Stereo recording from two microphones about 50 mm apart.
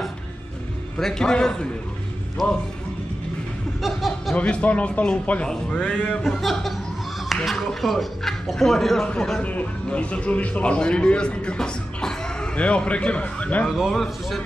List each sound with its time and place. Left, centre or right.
0.9 s a man's voice: centre
3.8 s speech: centre
4.4 s speech: left
5.5 s a man's voice: centre
7.2 s speech: centre
9.0 s a man's voice: centre
9.4 s speech: left
13.7 s speech: centre